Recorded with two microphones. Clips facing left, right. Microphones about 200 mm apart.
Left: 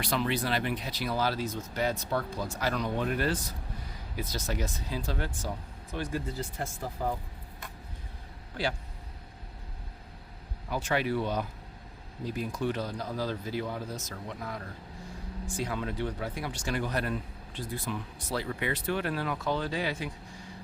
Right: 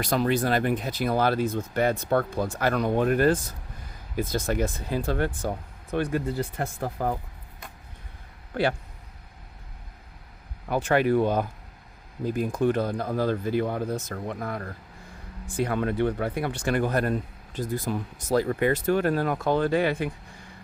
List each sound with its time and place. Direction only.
0.0 s speech: 45° right (ahead or behind)
8.5 s speech: 60° right (ahead or behind)
10.7 s speech: 55° right (ahead or behind)